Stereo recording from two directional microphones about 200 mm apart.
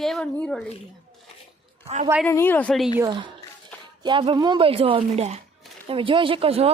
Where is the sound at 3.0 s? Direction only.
25° right (ahead or behind).